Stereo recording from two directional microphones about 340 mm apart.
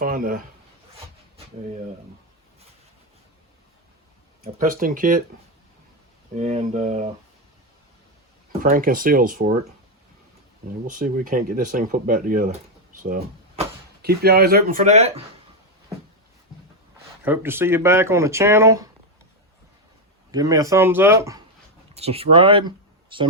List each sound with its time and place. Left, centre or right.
0.0 s speech: right
4.5 s speech: right
6.3 s speech: centre
8.6 s speech: right
10.8 s speech: right
17.2 s speech: centre
20.3 s speech: centre